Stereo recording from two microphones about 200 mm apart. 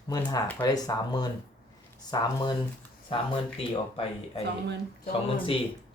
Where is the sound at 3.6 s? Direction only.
30° left (ahead or behind).